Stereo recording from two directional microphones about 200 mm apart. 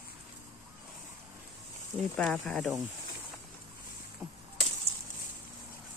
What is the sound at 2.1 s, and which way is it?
Speech, centre (ahead or behind).